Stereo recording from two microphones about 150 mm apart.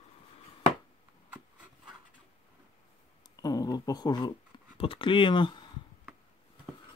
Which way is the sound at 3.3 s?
25° left (ahead or behind).